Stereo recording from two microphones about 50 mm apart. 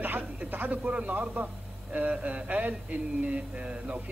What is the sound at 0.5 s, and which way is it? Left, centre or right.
A man's voice, right.